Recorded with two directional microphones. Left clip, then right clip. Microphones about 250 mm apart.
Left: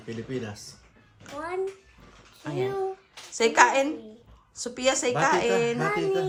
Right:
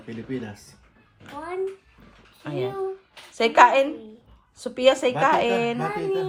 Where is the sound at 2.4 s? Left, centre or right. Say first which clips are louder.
Right 1 dB; centre.